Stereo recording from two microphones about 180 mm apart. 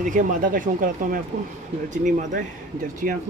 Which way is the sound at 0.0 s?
50° right (ahead or behind).